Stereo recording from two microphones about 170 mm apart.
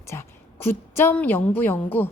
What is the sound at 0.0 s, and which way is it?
A woman's voice, 15° left (ahead or behind).